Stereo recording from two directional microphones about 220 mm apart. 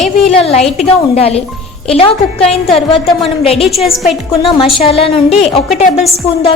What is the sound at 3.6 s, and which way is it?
Speech, centre (ahead or behind).